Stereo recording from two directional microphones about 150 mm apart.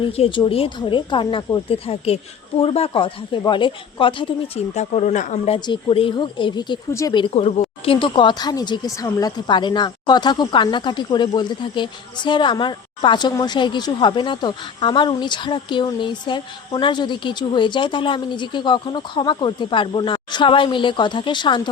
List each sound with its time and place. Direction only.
0.0 s speech: 35° left (ahead or behind)
4.7 s speech: 50° left (ahead or behind)
5.5 s speech: 30° left (ahead or behind)
7.3 s speech: 45° left (ahead or behind); by 21.7 s 30° left (ahead or behind)